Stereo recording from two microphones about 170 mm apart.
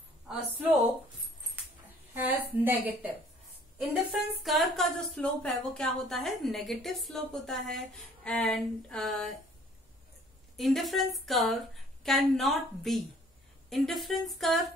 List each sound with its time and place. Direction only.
2.1 s a sound: 10° right (ahead or behind)
3.7 s speech: centre (ahead or behind)
10.5 s speech: centre (ahead or behind)